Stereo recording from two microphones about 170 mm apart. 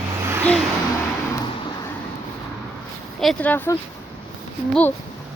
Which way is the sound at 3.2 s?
5° left (ahead or behind).